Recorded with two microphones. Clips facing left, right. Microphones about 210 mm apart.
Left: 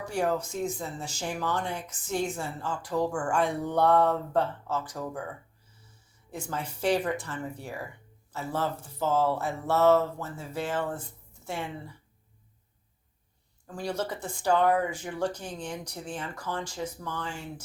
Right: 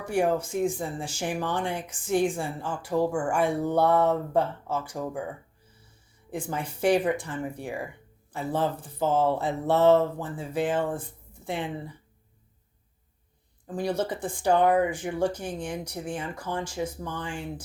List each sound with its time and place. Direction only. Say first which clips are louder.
0.2 s a woman's voice: right 4 dB; 10° right (ahead or behind)
6.5 s a woman's voice: right 4 dB; 10° right (ahead or behind)
13.7 s a woman's voice: right 4 dB; 20° right (ahead or behind)